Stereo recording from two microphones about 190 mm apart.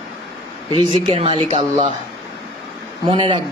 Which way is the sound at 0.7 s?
25° right (ahead or behind).